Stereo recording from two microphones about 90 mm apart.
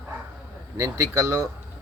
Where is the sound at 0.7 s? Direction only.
35° right (ahead or behind).